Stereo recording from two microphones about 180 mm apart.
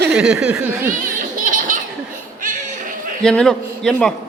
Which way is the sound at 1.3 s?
45° right (ahead or behind).